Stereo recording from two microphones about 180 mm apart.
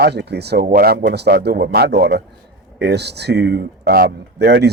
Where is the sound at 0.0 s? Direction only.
70° right (ahead or behind).